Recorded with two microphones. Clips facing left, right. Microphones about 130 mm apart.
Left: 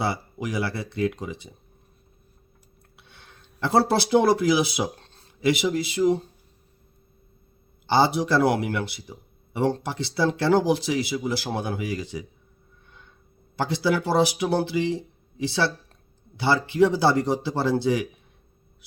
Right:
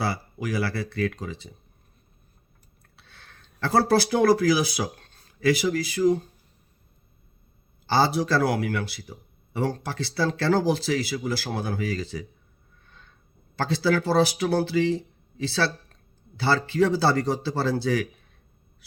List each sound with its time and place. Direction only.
0.0 s speech: 20° left (ahead or behind)
2.9 s speech: 20° left (ahead or behind)
7.9 s speech: 20° left (ahead or behind)
13.6 s speech: 20° left (ahead or behind)